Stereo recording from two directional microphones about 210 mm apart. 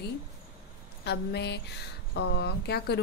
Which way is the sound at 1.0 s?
50° left (ahead or behind).